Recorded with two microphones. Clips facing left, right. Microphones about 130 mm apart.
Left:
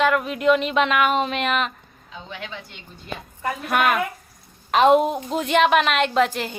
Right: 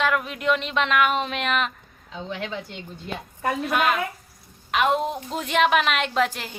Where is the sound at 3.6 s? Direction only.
55° left (ahead or behind).